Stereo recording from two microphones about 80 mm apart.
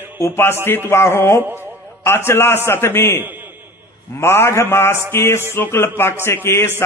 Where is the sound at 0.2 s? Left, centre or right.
Left.